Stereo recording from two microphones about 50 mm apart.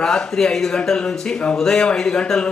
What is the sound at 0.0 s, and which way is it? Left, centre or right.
Speech, centre.